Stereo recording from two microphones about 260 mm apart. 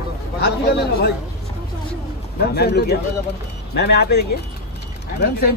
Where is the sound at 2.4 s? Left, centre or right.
Left.